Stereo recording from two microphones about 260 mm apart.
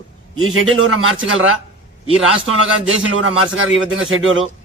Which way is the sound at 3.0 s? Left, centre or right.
Right.